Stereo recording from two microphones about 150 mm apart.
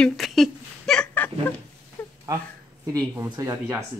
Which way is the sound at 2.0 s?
15° left (ahead or behind).